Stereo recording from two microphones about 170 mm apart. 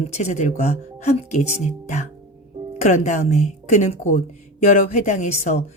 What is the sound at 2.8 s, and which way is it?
A woman's voice, 45° left (ahead or behind).